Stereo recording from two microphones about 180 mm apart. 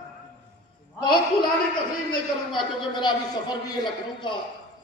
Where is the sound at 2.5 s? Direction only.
25° left (ahead or behind).